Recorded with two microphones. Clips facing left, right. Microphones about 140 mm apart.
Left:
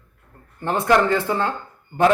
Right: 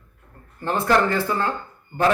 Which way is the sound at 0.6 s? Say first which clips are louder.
Left 2 dB; 15° left (ahead or behind).